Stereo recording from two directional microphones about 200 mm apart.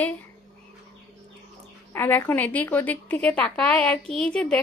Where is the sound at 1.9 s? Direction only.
10° left (ahead or behind).